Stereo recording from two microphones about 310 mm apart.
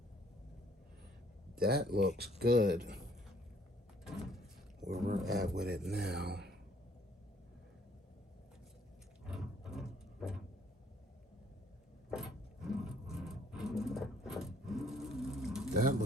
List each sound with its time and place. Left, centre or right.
1.5 s speech: right
4.0 s sliding door: centre
4.8 s speech: centre
5.5 s speech: right
9.2 s a sound: centre
12.1 s a sound: centre
15.7 s pigeon: right